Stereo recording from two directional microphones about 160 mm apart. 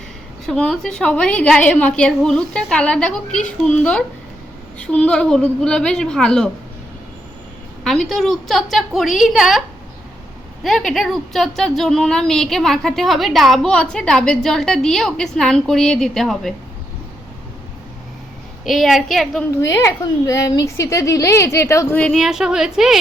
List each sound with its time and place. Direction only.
0.4 s a woman's voice: centre (ahead or behind)
4.8 s a woman's voice: 5° left (ahead or behind)
7.9 s a woman's voice: centre (ahead or behind)
18.6 s a woman's voice: centre (ahead or behind)
19.6 s a woman's voice: 20° left (ahead or behind); by 23.0 s 5° right (ahead or behind)